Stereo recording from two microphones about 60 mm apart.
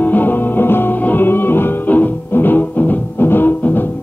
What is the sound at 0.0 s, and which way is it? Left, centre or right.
Music, left.